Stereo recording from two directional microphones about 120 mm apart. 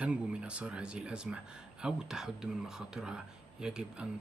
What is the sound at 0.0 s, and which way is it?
Speech, 10° right (ahead or behind).